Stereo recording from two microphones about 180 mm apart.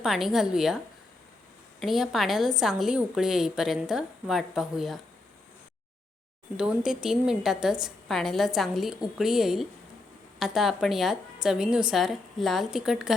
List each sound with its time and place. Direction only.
0.0 s a woman's voice: centre (ahead or behind)
1.8 s a woman's voice: centre (ahead or behind)
6.6 s a woman's voice: 5° right (ahead or behind)